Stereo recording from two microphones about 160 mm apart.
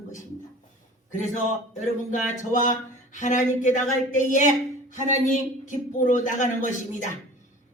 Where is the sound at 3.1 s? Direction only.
50° left (ahead or behind).